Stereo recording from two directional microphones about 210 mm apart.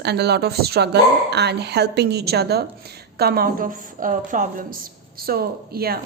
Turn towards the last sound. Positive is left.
turn(degrees=-45)  # may be behind; listen again after turning